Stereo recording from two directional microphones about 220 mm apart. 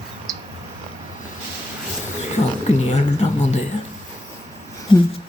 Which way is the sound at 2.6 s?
30° left (ahead or behind).